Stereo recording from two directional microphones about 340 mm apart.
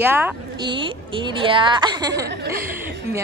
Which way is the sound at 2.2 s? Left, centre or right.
Right.